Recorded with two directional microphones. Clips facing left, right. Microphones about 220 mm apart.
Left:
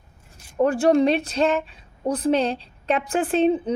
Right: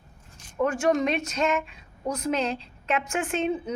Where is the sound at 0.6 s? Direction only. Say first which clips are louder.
Left 6 dB; 35° left (ahead or behind).